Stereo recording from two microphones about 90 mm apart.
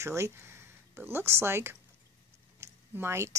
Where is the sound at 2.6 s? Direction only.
30° right (ahead or behind).